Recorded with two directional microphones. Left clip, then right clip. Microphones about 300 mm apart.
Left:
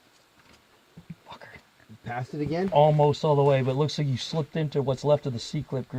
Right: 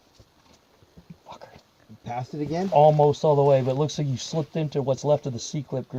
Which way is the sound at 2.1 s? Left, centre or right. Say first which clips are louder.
Right 1 dB; left.